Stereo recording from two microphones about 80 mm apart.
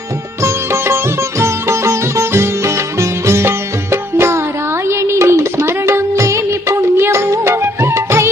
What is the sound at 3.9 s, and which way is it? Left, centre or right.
Music, right.